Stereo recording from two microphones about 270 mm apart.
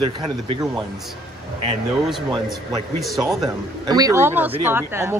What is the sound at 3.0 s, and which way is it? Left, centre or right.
Speech, centre.